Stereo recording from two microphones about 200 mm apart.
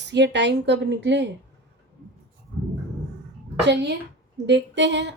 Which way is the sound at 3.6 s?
60° right (ahead or behind).